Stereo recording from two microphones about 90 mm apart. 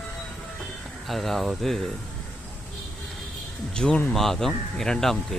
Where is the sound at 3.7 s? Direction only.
10° left (ahead or behind).